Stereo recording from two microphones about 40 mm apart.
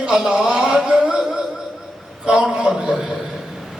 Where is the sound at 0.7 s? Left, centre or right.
Centre.